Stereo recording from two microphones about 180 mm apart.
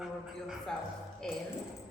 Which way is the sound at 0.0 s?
Centre (ahead or behind).